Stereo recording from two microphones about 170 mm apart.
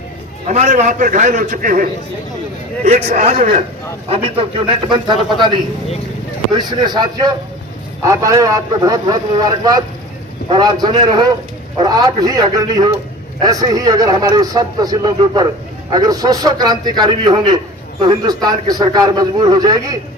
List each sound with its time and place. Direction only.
0.4 s a man's voice: 45° right (ahead or behind)
2.8 s a man's voice: 45° right (ahead or behind); by 5.5 s 25° right (ahead or behind)
6.5 s a man's voice: 25° right (ahead or behind)
10.5 s a man's voice: 25° right (ahead or behind)